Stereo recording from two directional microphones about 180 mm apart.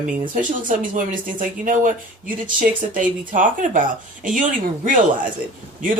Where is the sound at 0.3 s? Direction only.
45° right (ahead or behind).